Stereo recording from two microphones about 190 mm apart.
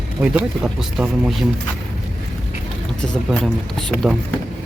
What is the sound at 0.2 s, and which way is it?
Speech, 5° right (ahead or behind).